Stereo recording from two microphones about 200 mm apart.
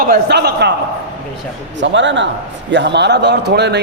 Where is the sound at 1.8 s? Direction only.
65° right (ahead or behind).